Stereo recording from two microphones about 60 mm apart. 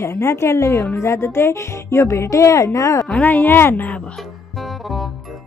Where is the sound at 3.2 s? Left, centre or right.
Left.